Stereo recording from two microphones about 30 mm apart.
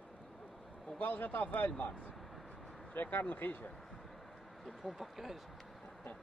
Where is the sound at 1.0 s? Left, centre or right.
Left.